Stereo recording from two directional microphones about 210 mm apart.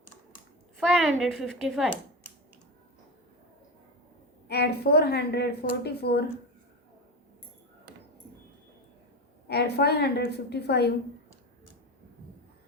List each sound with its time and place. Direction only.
0.8 s a woman's voice: centre (ahead or behind)
4.4 s a woman's voice: 50° left (ahead or behind)
9.5 s a woman's voice: 50° left (ahead or behind)